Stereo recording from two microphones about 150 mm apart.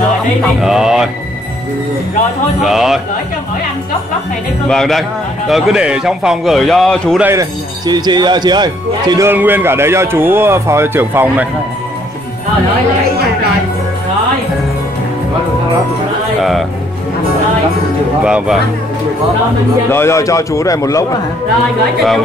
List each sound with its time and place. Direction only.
0.6 s a man's voice: 5° right (ahead or behind)
2.6 s a man's voice: 5° right (ahead or behind)
4.6 s a man's voice: centre (ahead or behind)
7.2 s speech: 15° right (ahead or behind)
7.8 s speech: 30° right (ahead or behind)
9.3 s speech: 15° right (ahead or behind)
18.2 s a man's voice: 5° right (ahead or behind)
19.9 s a man's voice: 15° left (ahead or behind)